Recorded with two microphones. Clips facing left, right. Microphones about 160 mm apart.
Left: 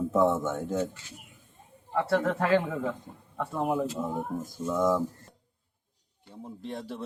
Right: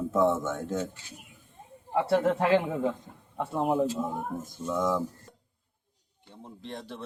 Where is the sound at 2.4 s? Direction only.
15° right (ahead or behind).